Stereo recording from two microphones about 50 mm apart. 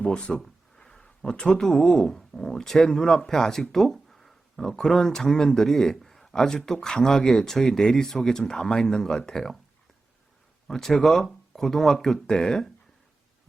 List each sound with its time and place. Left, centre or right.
0.0 s speech: left
0.4 s a sound: centre
1.6 s speech: centre
10.7 s speech: centre